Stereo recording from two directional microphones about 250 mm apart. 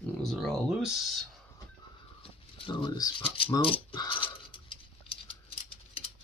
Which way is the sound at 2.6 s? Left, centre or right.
Centre.